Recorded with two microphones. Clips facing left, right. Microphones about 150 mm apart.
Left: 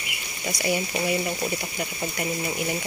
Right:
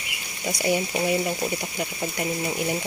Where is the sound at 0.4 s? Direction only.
20° right (ahead or behind).